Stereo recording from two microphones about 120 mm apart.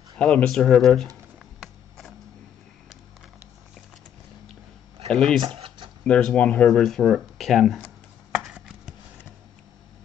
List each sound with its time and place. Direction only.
0.2 s speech: 5° left (ahead or behind)
1.6 s a sound: 5° left (ahead or behind)
5.1 s speech: 5° left (ahead or behind)
5.5 s a sound: 50° right (ahead or behind)
6.0 s speech: 10° left (ahead or behind)
8.4 s chopping: 5° right (ahead or behind)